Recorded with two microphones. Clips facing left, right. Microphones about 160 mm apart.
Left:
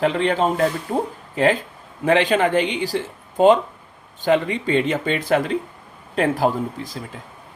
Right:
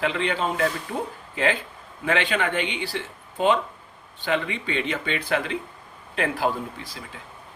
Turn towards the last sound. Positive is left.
turn(degrees=40)  # may be behind; listen again after turning